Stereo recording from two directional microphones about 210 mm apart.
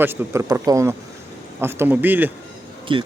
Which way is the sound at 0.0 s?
10° right (ahead or behind).